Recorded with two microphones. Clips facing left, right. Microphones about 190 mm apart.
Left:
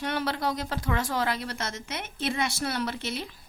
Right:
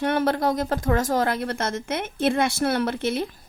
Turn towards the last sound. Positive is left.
turn(degrees=-50)  # may be behind; listen again after turning